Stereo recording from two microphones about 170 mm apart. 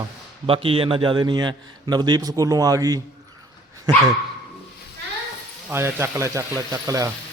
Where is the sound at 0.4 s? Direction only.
35° right (ahead or behind).